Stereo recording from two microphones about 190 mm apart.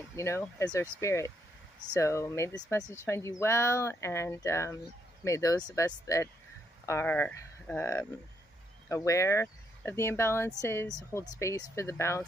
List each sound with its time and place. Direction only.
0.1 s speech: 15° left (ahead or behind)